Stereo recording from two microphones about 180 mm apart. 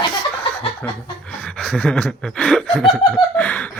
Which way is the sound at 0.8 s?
5° left (ahead or behind).